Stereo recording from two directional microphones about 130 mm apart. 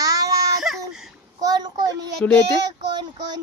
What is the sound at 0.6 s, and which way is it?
Speech, centre (ahead or behind).